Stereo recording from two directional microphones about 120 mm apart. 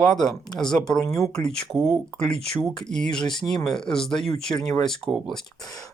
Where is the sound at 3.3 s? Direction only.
35° left (ahead or behind).